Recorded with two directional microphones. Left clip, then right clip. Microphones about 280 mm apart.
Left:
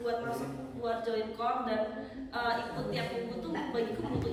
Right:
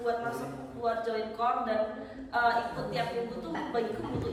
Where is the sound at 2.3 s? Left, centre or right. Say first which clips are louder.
Right 6 dB; centre.